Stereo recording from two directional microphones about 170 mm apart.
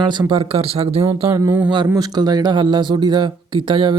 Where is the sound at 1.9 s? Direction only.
25° right (ahead or behind).